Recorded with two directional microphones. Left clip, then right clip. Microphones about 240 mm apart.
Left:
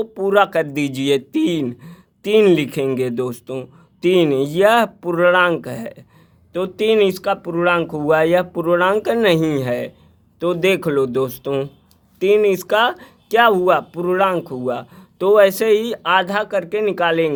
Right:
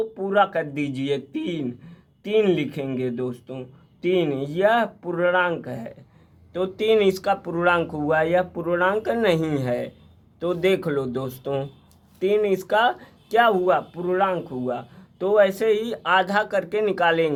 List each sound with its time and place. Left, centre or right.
0.0 s speech: left